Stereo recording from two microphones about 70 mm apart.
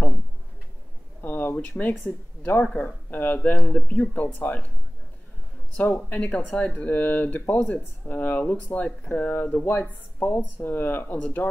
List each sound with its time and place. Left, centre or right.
1.2 s speech: left
5.8 s speech: left